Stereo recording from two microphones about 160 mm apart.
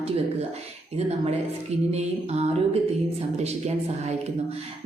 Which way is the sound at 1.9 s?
40° right (ahead or behind).